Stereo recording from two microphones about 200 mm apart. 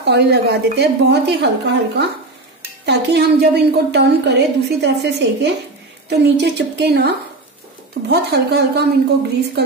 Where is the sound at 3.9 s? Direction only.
55° right (ahead or behind).